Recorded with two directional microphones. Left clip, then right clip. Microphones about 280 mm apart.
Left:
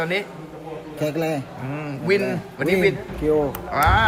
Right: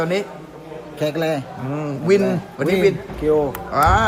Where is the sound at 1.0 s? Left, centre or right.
Centre.